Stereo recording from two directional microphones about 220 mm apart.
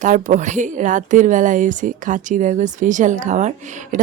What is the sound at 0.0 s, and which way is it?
A woman's voice, 35° right (ahead or behind).